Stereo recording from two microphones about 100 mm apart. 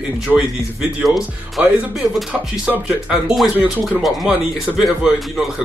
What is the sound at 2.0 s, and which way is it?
Speech, 5° right (ahead or behind).